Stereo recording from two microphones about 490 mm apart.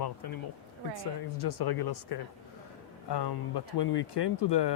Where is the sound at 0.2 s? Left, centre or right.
Left.